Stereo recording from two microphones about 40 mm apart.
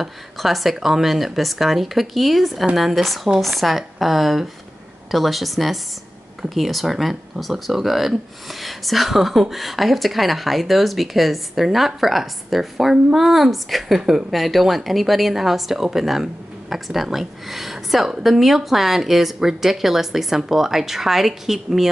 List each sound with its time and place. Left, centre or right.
0.0 s speech: centre